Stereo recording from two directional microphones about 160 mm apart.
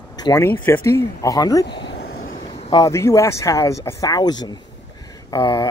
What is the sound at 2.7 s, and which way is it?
Speech, 20° left (ahead or behind).